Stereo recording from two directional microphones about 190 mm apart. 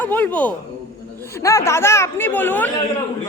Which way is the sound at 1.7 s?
15° left (ahead or behind).